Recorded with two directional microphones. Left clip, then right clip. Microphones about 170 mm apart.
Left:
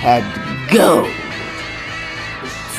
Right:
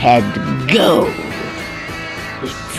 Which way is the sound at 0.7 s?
35° right (ahead or behind).